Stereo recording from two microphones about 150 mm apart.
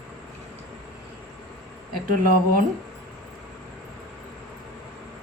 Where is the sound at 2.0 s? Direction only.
65° right (ahead or behind).